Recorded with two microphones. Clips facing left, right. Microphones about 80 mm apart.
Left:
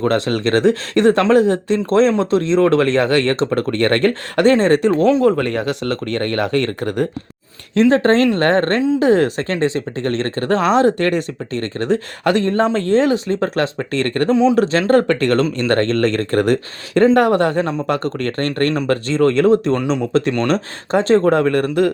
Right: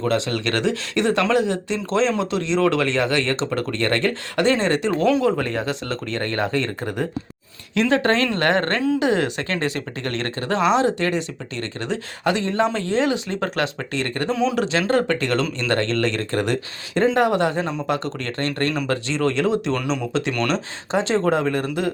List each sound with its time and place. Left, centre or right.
0.0 s speech: left
5.2 s speech: left
7.8 s speech: left